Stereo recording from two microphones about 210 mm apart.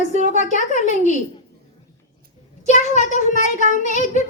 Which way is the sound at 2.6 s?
35° left (ahead or behind).